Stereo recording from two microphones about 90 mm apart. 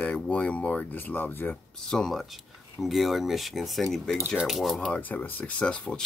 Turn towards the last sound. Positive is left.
turn(degrees=10)  # may be behind; listen again after turning